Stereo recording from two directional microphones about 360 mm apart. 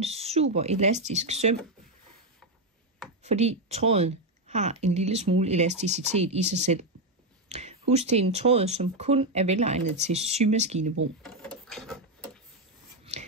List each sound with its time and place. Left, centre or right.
0.0 s speech: centre
3.3 s speech: centre
7.4 s a sound: centre
7.9 s speech: centre
11.2 s drawer open or close: centre
13.1 s a sound: centre